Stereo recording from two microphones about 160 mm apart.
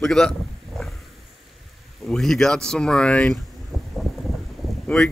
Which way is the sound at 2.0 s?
Centre (ahead or behind).